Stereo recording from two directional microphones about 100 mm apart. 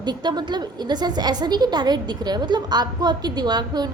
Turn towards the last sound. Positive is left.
turn(degrees=-45)  # may be behind; listen again after turning